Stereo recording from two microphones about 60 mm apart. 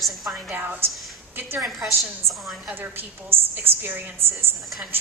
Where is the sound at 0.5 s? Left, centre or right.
Right.